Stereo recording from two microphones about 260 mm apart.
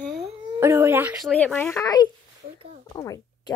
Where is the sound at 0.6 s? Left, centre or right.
Centre.